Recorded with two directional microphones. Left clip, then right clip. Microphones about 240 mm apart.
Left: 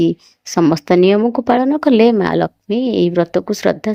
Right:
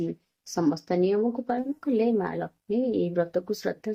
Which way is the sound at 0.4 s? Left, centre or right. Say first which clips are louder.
Left 13 dB; left.